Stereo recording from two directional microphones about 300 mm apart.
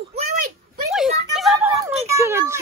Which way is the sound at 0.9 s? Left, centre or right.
Centre.